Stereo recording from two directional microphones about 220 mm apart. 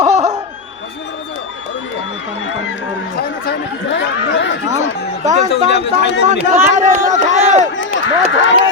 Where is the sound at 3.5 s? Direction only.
55° left (ahead or behind).